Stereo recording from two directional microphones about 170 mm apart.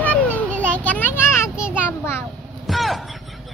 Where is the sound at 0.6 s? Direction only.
10° left (ahead or behind).